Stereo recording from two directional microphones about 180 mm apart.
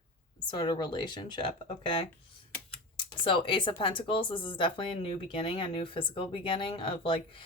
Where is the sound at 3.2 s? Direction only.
25° left (ahead or behind).